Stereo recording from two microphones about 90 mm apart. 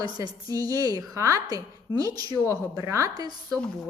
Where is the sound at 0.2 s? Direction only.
40° right (ahead or behind).